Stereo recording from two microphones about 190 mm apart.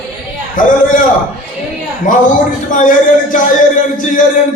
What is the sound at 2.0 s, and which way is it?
A man's voice, 45° left (ahead or behind).